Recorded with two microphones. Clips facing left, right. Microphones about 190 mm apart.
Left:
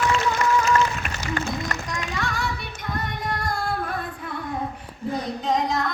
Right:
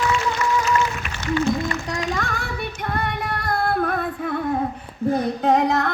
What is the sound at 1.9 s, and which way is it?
Child singing, 45° right (ahead or behind).